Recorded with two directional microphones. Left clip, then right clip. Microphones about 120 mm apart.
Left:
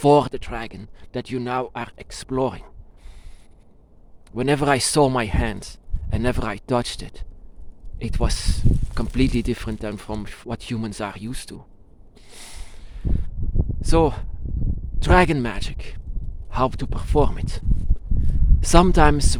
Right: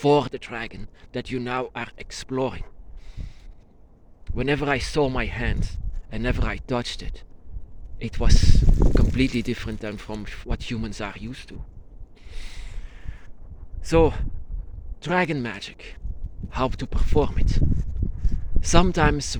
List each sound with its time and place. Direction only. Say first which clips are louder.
0.0 s speech: left 4 dB; 35° left (ahead or behind)
4.3 s speech: left 4 dB; 35° left (ahead or behind); by 5.1 s 55° left (ahead or behind)
5.1 s speech: left 4 dB; 40° left (ahead or behind)
11.3 s speech: left 4 dB; 55° left (ahead or behind)
12.3 s a sound: left 2 dB; 80° left
13.8 s speech: even; 15° left (ahead or behind)
14.9 s a sound: left 7 dB; 70° left (ahead or behind)
15.2 s speech: left 5 dB; 50° left (ahead or behind)
18.6 s speech: left 4 dB; 40° left (ahead or behind)